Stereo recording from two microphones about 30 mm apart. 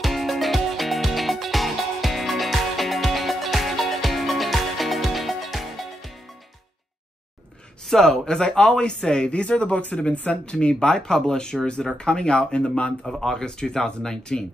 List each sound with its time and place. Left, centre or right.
0.0 s music: centre
7.9 s speech: centre
8.3 s speech: left
10.4 s speech: left
10.8 s speech: left
13.2 s speech: centre
13.5 s speech: left
14.0 s speech: centre